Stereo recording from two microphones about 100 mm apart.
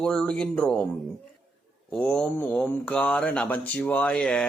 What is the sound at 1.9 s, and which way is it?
Speech, 5° left (ahead or behind).